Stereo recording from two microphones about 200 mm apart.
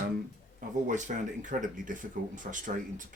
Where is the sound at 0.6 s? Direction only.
40° right (ahead or behind).